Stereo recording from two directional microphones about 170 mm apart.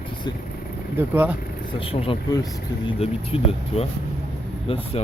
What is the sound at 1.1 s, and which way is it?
Speech, 10° right (ahead or behind).